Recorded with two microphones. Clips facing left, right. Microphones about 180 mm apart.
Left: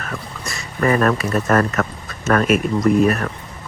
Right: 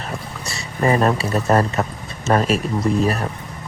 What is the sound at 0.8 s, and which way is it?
Speech, 25° right (ahead or behind).